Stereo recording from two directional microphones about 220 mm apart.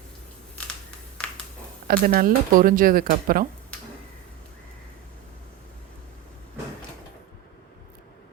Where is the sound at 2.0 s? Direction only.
40° right (ahead or behind).